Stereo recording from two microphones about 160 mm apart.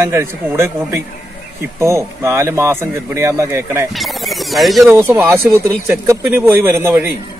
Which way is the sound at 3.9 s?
Centre (ahead or behind).